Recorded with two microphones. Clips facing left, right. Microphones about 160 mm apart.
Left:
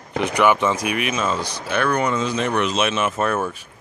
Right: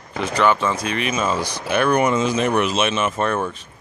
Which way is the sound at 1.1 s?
10° right (ahead or behind).